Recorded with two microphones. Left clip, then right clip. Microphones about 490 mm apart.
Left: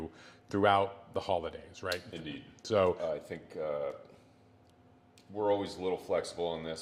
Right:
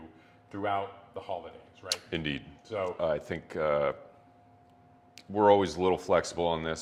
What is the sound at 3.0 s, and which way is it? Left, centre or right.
Speech, right.